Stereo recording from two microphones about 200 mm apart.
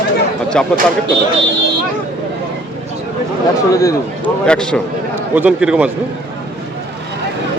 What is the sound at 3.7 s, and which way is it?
Speech, 15° left (ahead or behind).